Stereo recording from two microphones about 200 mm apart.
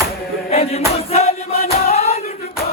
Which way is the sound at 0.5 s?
30° left (ahead or behind).